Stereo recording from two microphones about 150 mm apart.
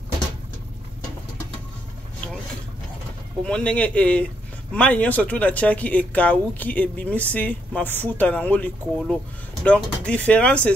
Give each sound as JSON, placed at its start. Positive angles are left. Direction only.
{"t": 3.4, "sound": "speech", "side_deg": 5}